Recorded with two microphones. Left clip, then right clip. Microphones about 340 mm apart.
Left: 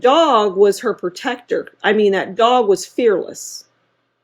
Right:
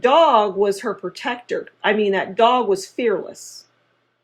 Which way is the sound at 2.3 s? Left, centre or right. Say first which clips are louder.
Left 1 dB; left.